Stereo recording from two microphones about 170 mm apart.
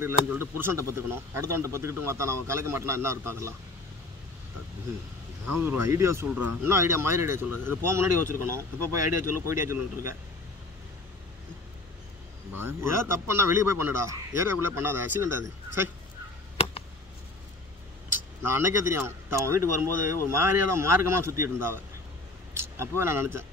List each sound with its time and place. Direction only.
0.0 s speech: 15° right (ahead or behind)
5.7 s speech: 15° right (ahead or behind)
12.5 s speech: 15° right (ahead or behind)
16.5 s a sound: 35° left (ahead or behind)
18.4 s speech: 15° right (ahead or behind)